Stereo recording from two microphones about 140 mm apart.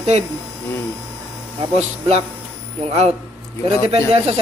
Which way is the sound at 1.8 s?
50° right (ahead or behind).